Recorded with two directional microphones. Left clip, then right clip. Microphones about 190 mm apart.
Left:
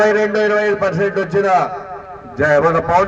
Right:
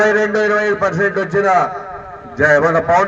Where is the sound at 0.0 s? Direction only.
30° left (ahead or behind).